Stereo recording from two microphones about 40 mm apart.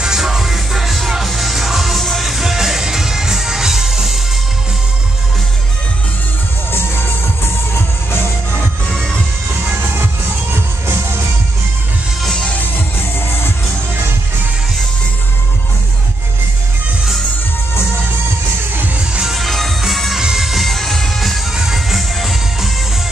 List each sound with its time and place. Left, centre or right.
0.0 s music: centre
6.7 s music: left
9.7 s music: right
10.5 s music: right
19.2 s music: centre
21.5 s music: centre